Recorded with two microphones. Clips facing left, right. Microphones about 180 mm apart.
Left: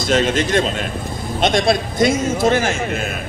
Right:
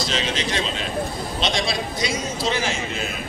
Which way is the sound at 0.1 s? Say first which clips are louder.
Left 14 dB; 50° left (ahead or behind).